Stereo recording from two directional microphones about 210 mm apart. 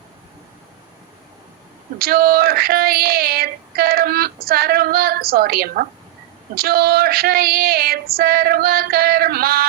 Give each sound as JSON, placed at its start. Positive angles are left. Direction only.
{"t": 2.0, "sound": "female singing", "side_deg": -45}